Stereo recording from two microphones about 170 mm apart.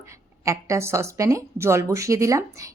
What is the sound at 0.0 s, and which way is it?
A woman's voice, 15° right (ahead or behind).